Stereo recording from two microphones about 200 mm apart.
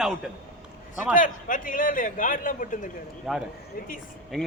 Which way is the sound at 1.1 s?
40° left (ahead or behind).